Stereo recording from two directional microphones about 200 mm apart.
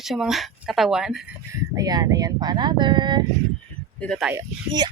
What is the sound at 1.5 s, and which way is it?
Speech, 20° right (ahead or behind).